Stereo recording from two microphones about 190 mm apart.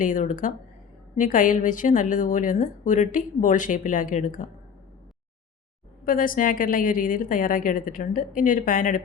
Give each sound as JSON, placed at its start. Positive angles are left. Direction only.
{"t": 0.0, "sound": "a woman's voice", "side_deg": 45}
{"t": 6.1, "sound": "a woman's voice", "side_deg": 45}